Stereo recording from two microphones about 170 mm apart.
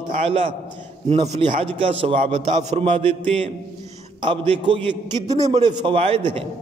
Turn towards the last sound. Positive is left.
turn(degrees=-35)  # may be behind; listen again after turning